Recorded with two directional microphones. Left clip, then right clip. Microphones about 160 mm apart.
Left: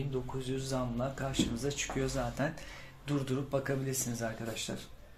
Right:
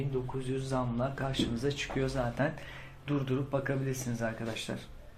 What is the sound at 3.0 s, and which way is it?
Speech, 30° left (ahead or behind).